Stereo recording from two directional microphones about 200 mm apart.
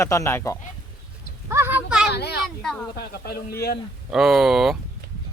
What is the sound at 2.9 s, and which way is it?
Speech, 50° left (ahead or behind).